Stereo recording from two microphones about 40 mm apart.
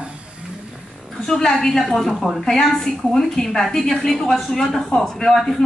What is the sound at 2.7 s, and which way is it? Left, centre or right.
A woman's voice, centre.